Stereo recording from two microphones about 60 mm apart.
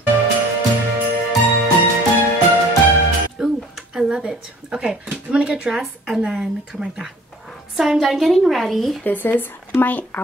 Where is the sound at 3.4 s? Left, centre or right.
Centre.